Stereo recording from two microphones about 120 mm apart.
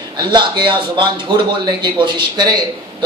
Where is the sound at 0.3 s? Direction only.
40° right (ahead or behind).